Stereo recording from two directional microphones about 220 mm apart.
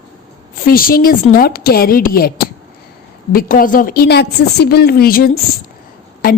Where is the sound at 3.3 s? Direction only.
40° left (ahead or behind).